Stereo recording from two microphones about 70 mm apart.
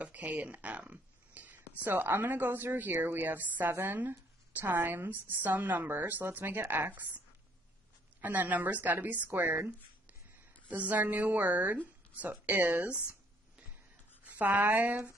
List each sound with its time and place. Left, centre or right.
0.0 s a woman's voice: right
10.7 s a woman's voice: right
14.2 s speech: right